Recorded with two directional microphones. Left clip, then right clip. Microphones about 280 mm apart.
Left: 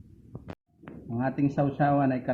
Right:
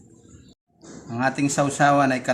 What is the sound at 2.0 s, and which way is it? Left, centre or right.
Speech, centre.